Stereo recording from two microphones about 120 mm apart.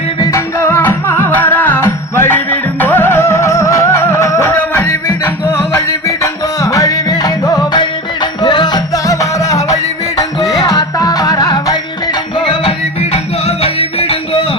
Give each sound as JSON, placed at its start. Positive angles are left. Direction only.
{"t": 0.3, "sound": "music", "side_deg": 20}
{"t": 12.5, "sound": "music", "side_deg": 50}